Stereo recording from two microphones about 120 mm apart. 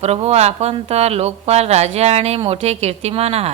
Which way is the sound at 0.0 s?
60° right (ahead or behind).